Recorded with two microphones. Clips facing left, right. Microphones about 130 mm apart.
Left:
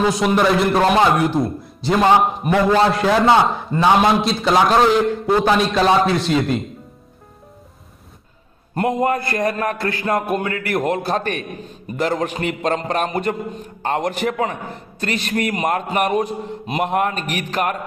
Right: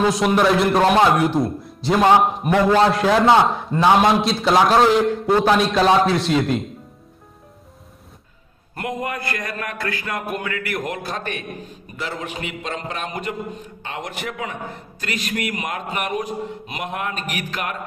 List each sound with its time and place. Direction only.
0.0 s a man's voice: centre (ahead or behind)
8.7 s a man's voice: 25° left (ahead or behind)